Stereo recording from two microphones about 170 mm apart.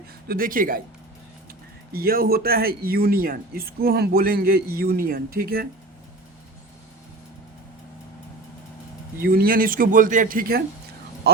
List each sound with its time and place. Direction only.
0.3 s speech: 55° right (ahead or behind)
1.9 s speech: 60° right (ahead or behind)
9.2 s speech: 60° right (ahead or behind)